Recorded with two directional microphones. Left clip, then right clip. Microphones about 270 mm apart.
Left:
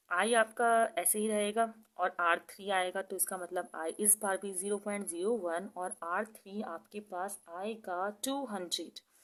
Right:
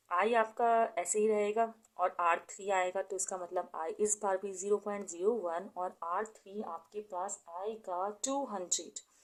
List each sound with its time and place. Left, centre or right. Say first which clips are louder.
0.1 s speech: left 1 dB; left